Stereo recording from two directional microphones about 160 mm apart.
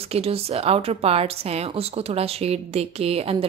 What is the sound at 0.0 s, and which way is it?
A woman's voice, 40° right (ahead or behind).